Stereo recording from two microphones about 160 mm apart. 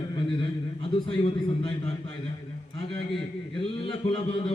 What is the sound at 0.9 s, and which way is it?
Speech, 35° left (ahead or behind).